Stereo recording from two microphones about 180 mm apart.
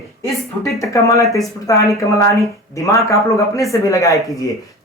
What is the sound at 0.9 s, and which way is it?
A man's voice, 15° left (ahead or behind).